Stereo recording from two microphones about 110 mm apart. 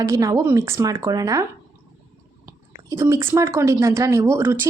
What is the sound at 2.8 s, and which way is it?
A woman's voice, 25° right (ahead or behind).